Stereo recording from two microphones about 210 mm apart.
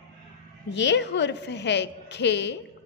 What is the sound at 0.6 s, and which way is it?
A woman's voice, 55° left (ahead or behind).